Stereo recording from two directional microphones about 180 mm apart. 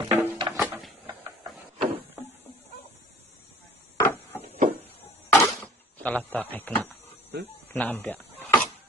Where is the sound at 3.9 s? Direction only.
15° left (ahead or behind).